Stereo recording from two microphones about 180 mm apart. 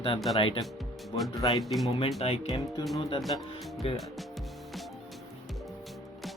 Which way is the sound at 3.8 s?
30° left (ahead or behind).